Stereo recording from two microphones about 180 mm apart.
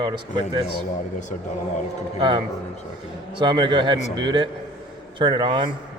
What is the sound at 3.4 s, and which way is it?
A man's voice, 25° right (ahead or behind).